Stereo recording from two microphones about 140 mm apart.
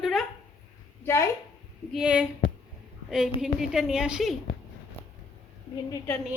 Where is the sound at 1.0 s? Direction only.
20° left (ahead or behind).